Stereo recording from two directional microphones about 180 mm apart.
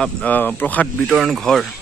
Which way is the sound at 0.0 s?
10° left (ahead or behind).